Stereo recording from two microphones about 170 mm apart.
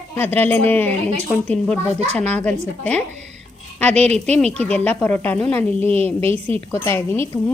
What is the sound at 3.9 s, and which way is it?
Speech, 40° right (ahead or behind).